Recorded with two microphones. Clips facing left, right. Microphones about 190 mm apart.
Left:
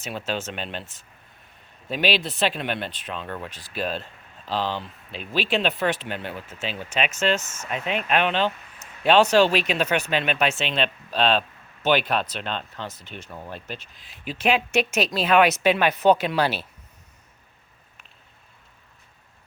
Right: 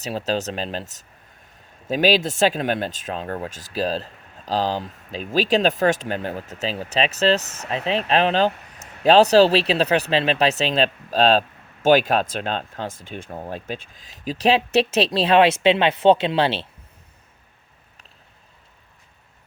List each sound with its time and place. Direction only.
0.0 s speech: 35° right (ahead or behind)